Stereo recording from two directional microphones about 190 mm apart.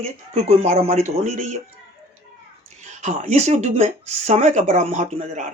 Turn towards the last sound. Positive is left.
turn(degrees=-40)  # may be behind; listen again after turning